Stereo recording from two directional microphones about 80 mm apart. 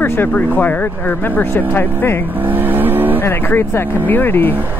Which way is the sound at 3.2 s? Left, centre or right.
Left.